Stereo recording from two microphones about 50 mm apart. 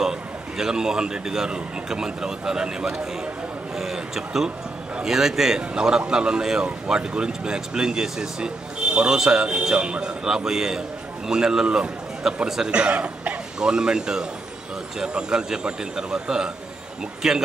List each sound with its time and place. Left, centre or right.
0.0 s a man's voice: centre; by 13.4 s right
13.6 s speech: centre